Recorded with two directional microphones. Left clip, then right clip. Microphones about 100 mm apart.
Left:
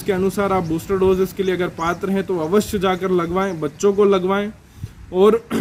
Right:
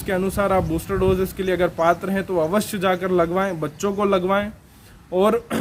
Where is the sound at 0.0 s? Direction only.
40° right (ahead or behind).